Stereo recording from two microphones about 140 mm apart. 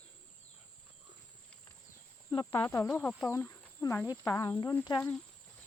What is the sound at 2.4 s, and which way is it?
Speech, 15° left (ahead or behind).